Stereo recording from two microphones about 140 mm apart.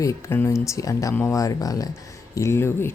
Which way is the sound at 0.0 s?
20° left (ahead or behind).